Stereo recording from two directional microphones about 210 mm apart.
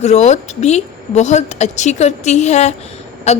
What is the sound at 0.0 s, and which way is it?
A woman's voice, 35° left (ahead or behind).